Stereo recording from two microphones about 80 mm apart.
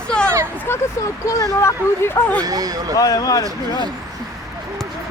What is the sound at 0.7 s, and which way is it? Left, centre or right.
Speech, left.